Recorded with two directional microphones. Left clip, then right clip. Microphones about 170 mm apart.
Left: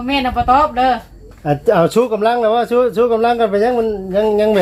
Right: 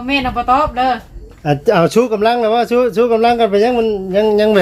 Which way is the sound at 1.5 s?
20° right (ahead or behind).